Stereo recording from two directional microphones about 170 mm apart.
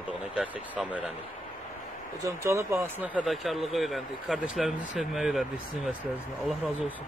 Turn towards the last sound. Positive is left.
turn(degrees=0)  # may be behind; listen again after turning